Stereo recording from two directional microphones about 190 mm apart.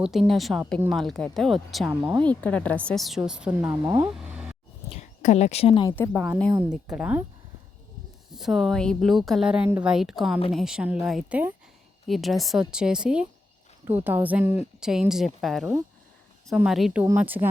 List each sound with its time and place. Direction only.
0.0 s a woman's voice: centre (ahead or behind)
2.2 s a woman's voice: 5° left (ahead or behind)
4.9 s speech: 35° left (ahead or behind)
6.1 s a woman's voice: 5° right (ahead or behind)
8.3 s a woman's voice: centre (ahead or behind)